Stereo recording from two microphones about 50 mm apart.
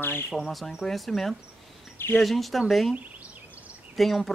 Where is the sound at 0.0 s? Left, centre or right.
Left.